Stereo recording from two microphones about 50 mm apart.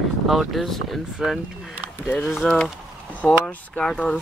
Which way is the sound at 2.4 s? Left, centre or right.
Centre.